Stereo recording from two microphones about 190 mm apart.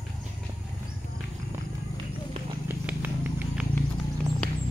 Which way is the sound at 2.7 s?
10° right (ahead or behind).